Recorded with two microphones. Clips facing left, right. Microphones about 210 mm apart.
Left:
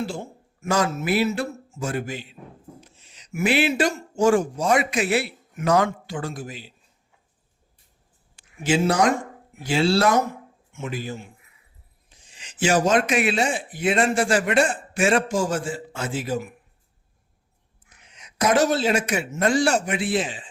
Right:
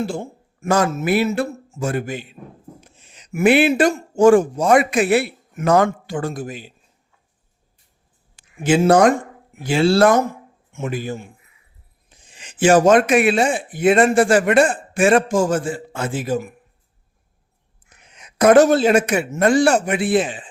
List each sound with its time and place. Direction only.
0.6 s a man's voice: 55° right (ahead or behind)
8.6 s a man's voice: 50° right (ahead or behind)
17.8 s a man's voice: 55° right (ahead or behind)